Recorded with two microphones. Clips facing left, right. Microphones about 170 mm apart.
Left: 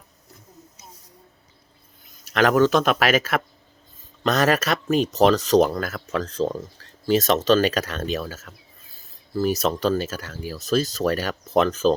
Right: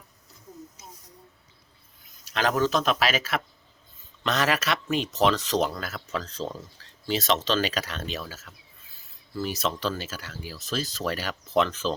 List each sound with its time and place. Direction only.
2.2 s speech: 60° left (ahead or behind); by 11.9 s 45° left (ahead or behind)